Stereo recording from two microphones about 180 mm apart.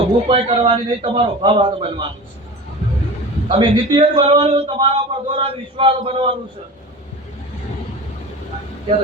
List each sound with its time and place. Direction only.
0.3 s speech: 30° right (ahead or behind)
3.5 s speech: 30° right (ahead or behind)